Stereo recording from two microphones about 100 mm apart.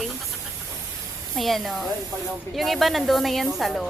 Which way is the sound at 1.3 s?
Centre (ahead or behind).